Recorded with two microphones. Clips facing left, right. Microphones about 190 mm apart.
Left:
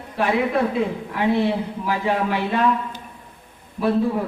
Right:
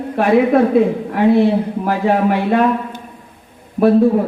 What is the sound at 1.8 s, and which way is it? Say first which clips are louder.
A man's voice: right 6 dB; 50° right (ahead or behind).